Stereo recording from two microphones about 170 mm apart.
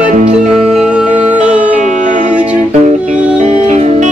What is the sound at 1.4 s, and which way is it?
Music, 45° right (ahead or behind).